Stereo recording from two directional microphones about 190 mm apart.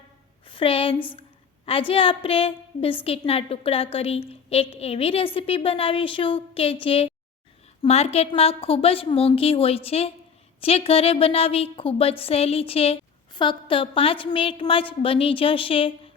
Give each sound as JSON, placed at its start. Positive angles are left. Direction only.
{"t": 0.4, "sound": "a woman's voice", "side_deg": 25}